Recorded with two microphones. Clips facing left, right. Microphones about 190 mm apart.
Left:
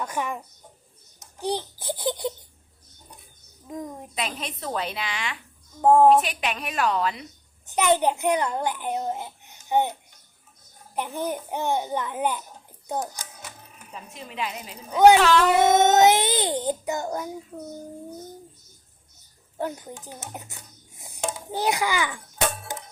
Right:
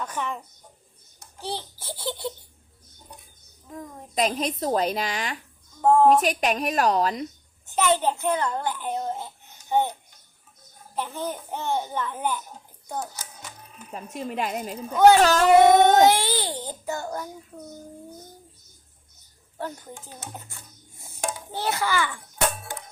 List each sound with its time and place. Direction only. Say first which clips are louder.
0.0 s a child's voice: left 2 dB; 10° left (ahead or behind)
3.7 s a child's voice: left 4 dB; 15° left (ahead or behind)
4.1 s a woman's voice: right 10 dB; 40° right (ahead or behind)
5.8 s a child's voice: left 2 dB; 15° left (ahead or behind)
6.2 s a woman's voice: right 6 dB; 40° right (ahead or behind)
7.7 s a child's voice: left 1 dB; 15° left (ahead or behind)
10.9 s a child's voice: left 2 dB; 15° left (ahead or behind)
13.9 s a woman's voice: right 7 dB; 45° right (ahead or behind)
14.9 s a child's voice: left 1 dB; 15° left (ahead or behind)
15.2 s a woman's voice: even; 40° right (ahead or behind)
15.7 s a child's voice: right 1 dB; 20° left (ahead or behind)
19.5 s a child's voice: left 4 dB; 15° left (ahead or behind)
21.0 s dishes: left 1 dB; 20° left (ahead or behind)